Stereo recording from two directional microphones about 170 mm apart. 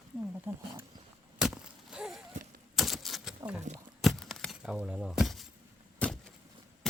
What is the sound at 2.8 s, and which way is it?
Typewriter, centre (ahead or behind).